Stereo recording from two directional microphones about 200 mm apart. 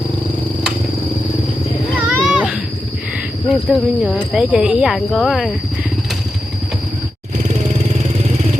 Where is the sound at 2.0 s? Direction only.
5° right (ahead or behind).